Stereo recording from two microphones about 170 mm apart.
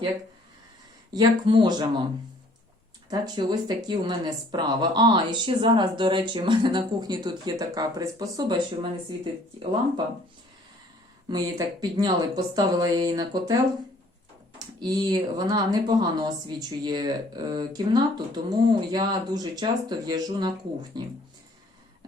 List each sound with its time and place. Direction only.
1.1 s speech: 25° right (ahead or behind)
3.1 s speech: 25° right (ahead or behind)
11.3 s speech: 25° right (ahead or behind)
14.8 s speech: 25° right (ahead or behind)